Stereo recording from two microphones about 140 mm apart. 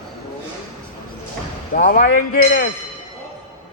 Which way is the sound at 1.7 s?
80° left.